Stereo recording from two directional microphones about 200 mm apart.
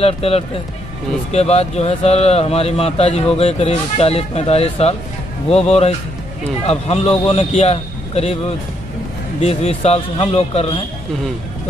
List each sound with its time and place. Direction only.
0.0 s a man's voice: 30° left (ahead or behind)